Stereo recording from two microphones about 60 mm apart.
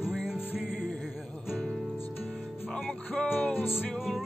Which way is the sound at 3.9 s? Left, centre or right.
Centre.